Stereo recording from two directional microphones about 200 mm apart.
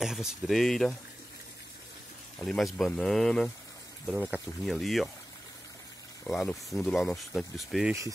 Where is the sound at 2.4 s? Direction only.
Centre (ahead or behind).